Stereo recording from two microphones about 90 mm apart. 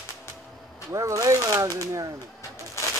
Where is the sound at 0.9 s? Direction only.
35° right (ahead or behind).